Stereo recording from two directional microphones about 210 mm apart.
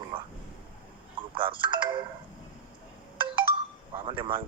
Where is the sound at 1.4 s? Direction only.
25° right (ahead or behind).